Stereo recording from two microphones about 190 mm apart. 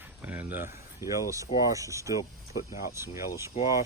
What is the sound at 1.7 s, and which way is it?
Speech, 15° right (ahead or behind).